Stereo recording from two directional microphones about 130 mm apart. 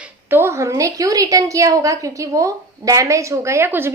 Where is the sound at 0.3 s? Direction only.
20° right (ahead or behind).